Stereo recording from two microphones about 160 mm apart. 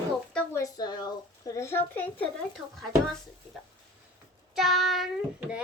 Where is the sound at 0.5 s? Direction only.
25° left (ahead or behind).